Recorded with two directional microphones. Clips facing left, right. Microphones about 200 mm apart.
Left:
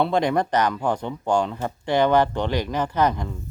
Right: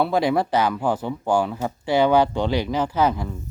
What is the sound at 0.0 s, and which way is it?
Speech, 5° right (ahead or behind).